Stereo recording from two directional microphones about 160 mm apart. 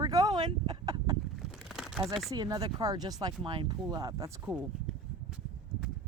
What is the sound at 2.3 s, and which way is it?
Speech, 25° right (ahead or behind).